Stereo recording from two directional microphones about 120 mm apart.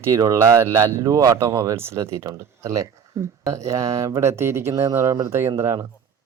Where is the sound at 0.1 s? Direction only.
25° right (ahead or behind).